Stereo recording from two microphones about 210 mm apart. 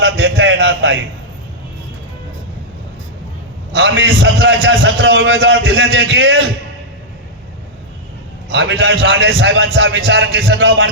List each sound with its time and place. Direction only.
0.0 s a sound: 55° right (ahead or behind)
3.7 s a man's voice: 55° right (ahead or behind)
8.4 s a man's voice: 55° right (ahead or behind)